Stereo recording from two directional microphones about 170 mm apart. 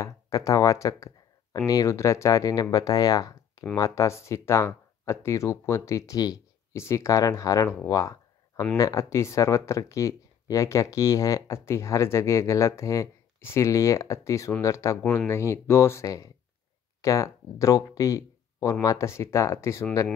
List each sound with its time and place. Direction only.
0.0 s speech: 20° left (ahead or behind)